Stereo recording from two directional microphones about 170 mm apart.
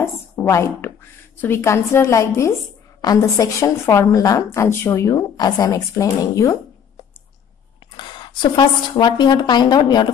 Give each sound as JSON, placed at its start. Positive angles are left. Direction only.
{"t": 0.0, "sound": "a woman's voice", "side_deg": 15}
{"t": 7.9, "sound": "a woman's voice", "side_deg": 25}